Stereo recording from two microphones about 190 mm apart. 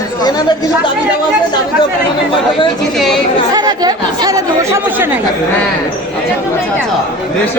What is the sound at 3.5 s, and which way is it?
Speech, 20° right (ahead or behind).